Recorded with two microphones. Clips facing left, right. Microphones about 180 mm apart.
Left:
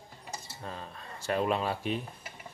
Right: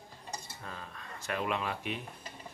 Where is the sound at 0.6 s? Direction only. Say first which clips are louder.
Left 4 dB; 30° left (ahead or behind).